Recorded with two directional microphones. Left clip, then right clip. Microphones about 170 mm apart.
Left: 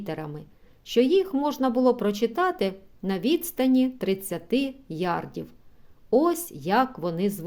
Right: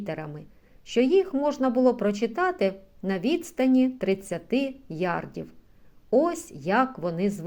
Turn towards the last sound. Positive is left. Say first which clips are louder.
# even
turn(degrees=25)  # may be behind; listen again after turning